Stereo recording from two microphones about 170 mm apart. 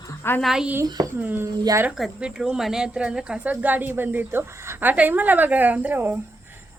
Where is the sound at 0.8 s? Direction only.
25° right (ahead or behind).